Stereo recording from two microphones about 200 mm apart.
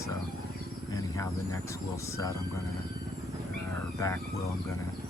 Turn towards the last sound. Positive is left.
turn(degrees=15)  # may be behind; listen again after turning